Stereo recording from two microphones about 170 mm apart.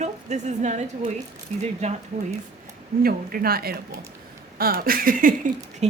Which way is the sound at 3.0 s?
60° right (ahead or behind).